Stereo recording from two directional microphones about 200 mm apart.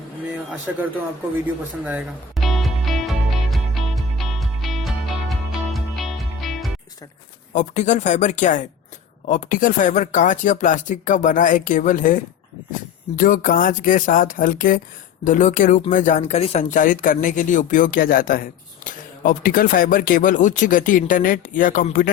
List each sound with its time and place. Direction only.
0.7 s speech: 5° right (ahead or behind)
1.8 s music: 5° right (ahead or behind)
7.5 s speech: 35° left (ahead or behind)